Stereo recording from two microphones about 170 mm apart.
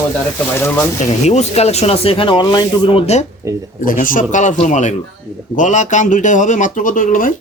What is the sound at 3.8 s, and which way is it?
Speech, 55° left (ahead or behind).